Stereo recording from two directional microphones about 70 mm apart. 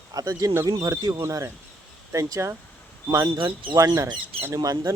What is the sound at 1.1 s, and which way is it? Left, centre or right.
Speech, right.